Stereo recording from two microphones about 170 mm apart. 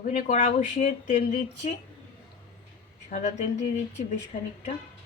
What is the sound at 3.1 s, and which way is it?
Speech, 45° left (ahead or behind).